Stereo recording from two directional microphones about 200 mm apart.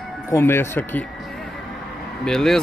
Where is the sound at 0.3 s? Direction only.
10° left (ahead or behind).